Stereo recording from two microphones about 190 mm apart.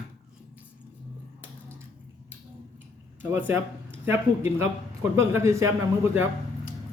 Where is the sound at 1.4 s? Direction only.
15° right (ahead or behind).